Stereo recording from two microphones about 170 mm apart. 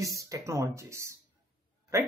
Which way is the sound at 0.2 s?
20° right (ahead or behind).